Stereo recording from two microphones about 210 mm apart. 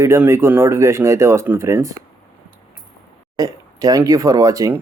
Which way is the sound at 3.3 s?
15° right (ahead or behind).